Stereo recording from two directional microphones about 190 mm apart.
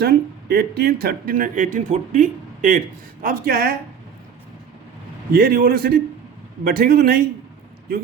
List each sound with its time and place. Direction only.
0.0 s speech: 55° right (ahead or behind)
5.3 s speech: 50° right (ahead or behind)